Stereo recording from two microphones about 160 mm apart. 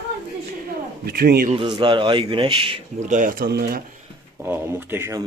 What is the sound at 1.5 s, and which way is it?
A man's voice, 30° right (ahead or behind).